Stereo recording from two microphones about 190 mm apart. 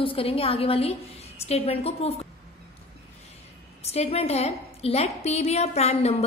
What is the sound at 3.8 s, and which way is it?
A woman's voice, 35° left (ahead or behind).